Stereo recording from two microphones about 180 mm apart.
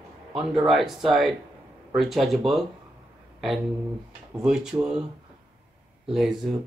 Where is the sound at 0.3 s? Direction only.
Centre (ahead or behind).